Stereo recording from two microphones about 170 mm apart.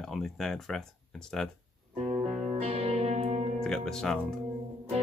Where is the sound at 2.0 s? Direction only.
35° right (ahead or behind).